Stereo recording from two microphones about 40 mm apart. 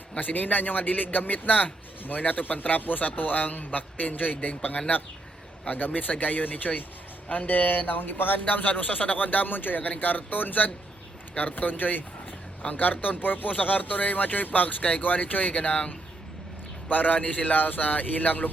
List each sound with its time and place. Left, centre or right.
0.2 s speech: left
12.6 s speech: left
13.2 s speech: left